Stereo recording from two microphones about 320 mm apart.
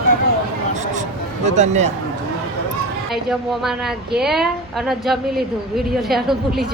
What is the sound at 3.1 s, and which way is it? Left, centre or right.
A woman's voice, centre.